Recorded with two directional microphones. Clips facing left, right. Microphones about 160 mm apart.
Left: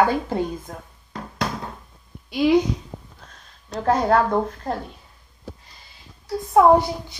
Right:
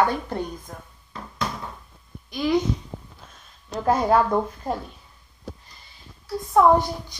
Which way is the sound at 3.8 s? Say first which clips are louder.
Left 1 dB; 10° right (ahead or behind).